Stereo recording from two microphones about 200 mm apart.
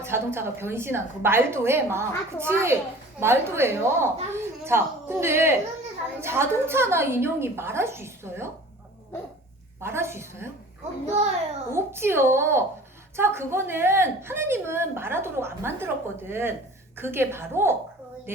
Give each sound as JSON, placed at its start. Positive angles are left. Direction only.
{"t": 0.0, "sound": "a woman's voice", "side_deg": -10}
{"t": 9.8, "sound": "a woman's voice", "side_deg": -10}
{"t": 11.0, "sound": "a child's voice", "side_deg": -35}
{"t": 11.7, "sound": "a woman's voice", "side_deg": -10}